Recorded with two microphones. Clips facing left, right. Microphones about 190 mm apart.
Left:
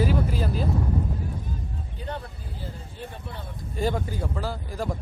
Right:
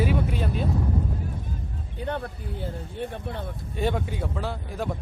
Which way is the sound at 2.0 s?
60° right (ahead or behind).